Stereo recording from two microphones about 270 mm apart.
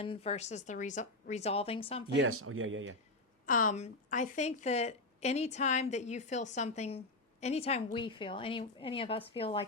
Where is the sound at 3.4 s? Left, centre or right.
Left.